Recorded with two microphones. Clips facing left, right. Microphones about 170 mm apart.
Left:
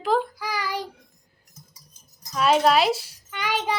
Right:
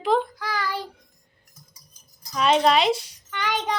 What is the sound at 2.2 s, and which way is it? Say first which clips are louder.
Child singing: even; 5° left (ahead or behind).